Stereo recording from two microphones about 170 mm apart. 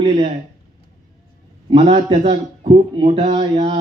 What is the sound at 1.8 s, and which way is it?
A man's voice, 40° right (ahead or behind).